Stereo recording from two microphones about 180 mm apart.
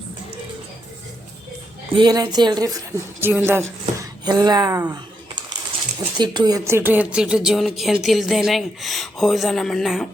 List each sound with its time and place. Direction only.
1.9 s a woman's voice: 25° right (ahead or behind); by 10.1 s centre (ahead or behind)